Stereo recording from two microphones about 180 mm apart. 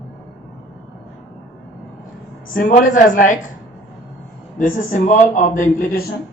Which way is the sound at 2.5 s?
50° left (ahead or behind).